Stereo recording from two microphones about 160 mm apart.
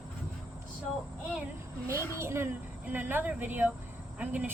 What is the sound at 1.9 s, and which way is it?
A woman's voice, 15° right (ahead or behind).